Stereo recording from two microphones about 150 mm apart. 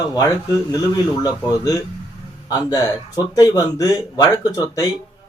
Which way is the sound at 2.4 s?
25° left (ahead or behind).